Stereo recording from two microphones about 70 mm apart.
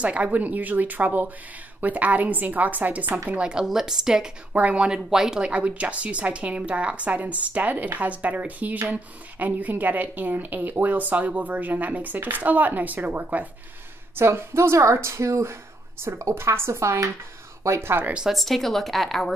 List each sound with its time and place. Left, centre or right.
0.0 s a woman's voice: centre
4.5 s a woman's voice: right
14.1 s speech: right
18.3 s a woman's voice: centre